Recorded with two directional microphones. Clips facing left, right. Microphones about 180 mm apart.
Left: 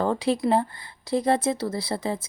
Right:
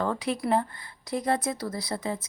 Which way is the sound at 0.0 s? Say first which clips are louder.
Left 5 dB; 30° left (ahead or behind).